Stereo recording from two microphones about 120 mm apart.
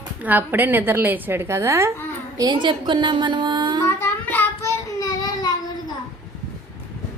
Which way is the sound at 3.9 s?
20° left (ahead or behind).